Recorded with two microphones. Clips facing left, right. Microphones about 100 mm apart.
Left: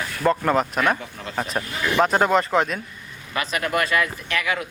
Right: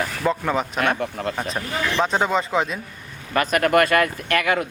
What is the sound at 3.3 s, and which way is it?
Speech, 50° right (ahead or behind).